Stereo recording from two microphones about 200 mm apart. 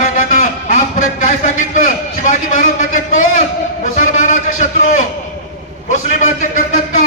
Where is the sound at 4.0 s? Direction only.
40° left (ahead or behind).